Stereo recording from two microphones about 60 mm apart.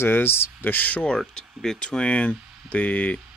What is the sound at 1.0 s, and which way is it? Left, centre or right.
Speech, centre.